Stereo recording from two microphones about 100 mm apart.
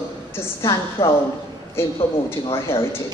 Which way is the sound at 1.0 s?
65° left (ahead or behind).